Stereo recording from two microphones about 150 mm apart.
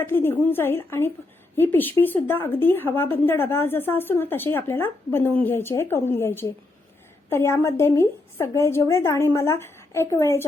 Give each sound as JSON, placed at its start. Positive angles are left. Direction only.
{"t": 0.0, "sound": "a woman's voice", "side_deg": 15}